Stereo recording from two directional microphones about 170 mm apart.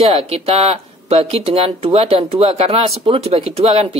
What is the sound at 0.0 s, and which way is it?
Speech, 35° right (ahead or behind).